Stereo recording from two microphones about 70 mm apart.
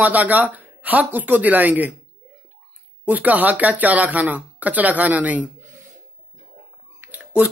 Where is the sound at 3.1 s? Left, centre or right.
Right.